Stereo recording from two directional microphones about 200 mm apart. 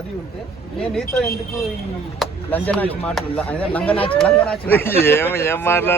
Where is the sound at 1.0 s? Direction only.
50° left (ahead or behind).